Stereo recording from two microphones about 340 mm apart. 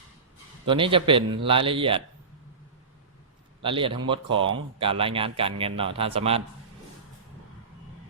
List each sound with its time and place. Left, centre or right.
0.6 s speech: centre
3.6 s speech: centre